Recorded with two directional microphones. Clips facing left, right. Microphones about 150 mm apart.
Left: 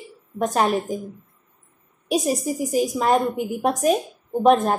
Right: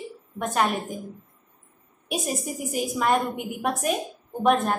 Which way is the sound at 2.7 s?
35° left (ahead or behind).